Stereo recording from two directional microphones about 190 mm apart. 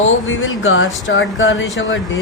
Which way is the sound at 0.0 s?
90° left.